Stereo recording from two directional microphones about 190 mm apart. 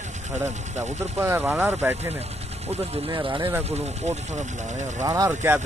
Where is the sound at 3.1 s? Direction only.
20° right (ahead or behind).